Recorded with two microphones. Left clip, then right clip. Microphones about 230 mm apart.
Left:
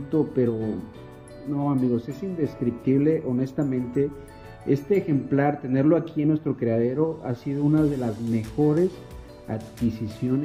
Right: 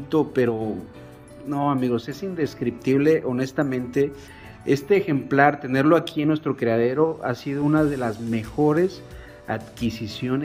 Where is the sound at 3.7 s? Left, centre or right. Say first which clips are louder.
Right 1 dB; right.